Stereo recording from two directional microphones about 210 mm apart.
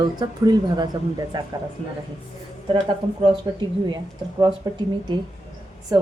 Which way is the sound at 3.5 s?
20° right (ahead or behind).